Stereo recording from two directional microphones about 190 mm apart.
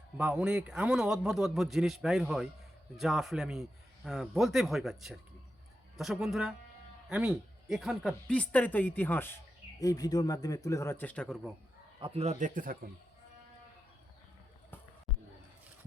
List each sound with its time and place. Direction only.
0.2 s a man's voice: 5° right (ahead or behind)
11.9 s a man's voice: 30° right (ahead or behind)